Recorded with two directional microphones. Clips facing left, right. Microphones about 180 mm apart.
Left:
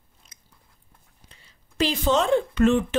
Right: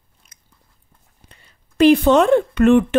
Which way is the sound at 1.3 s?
55° right (ahead or behind).